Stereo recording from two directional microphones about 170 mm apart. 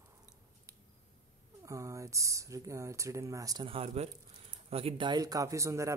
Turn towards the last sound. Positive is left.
turn(degrees=-15)  # may be behind; listen again after turning